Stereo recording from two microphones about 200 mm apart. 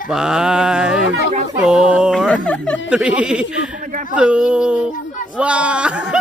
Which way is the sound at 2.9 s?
5° right (ahead or behind).